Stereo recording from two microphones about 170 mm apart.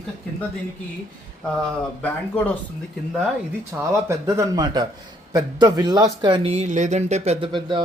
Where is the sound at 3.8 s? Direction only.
15° right (ahead or behind); by 7.4 s 40° right (ahead or behind).